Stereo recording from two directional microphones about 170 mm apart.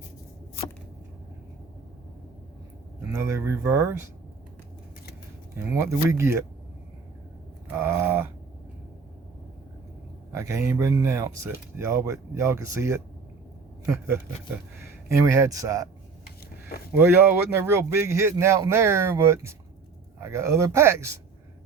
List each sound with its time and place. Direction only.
3.2 s speech: 15° right (ahead or behind)
5.5 s speech: 15° right (ahead or behind)
7.7 s a sound: 15° right (ahead or behind)
10.3 s speech: 15° right (ahead or behind)
15.2 s speech: 20° right (ahead or behind)
16.6 s a sound: 65° left (ahead or behind)
16.9 s speech: 15° right (ahead or behind)